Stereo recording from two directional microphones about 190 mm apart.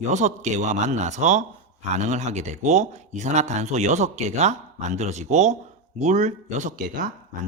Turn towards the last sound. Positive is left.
turn(degrees=-45)  # may be behind; listen again after turning